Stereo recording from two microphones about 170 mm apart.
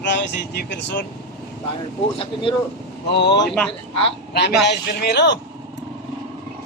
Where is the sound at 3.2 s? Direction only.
90° left.